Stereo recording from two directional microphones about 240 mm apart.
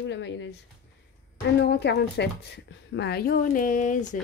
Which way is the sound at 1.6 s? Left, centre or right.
Left.